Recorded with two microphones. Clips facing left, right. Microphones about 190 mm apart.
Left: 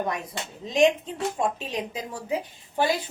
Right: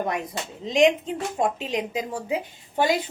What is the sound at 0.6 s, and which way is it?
A woman's voice, 20° right (ahead or behind).